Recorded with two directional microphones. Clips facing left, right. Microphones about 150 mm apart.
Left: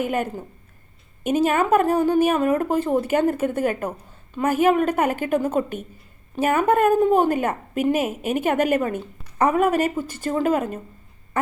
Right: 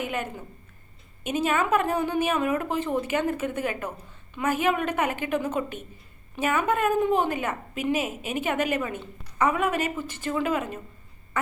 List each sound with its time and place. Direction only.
0.0 s speech: 45° left (ahead or behind)